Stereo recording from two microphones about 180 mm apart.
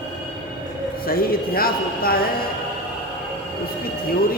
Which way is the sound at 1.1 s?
55° left (ahead or behind).